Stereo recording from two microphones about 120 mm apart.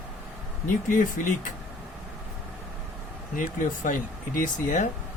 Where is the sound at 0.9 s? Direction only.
90° left.